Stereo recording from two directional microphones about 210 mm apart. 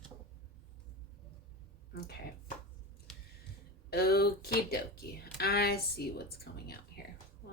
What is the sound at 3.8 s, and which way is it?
Speech, 50° left (ahead or behind).